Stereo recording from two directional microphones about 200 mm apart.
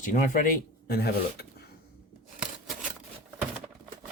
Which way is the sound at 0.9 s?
50° left (ahead or behind).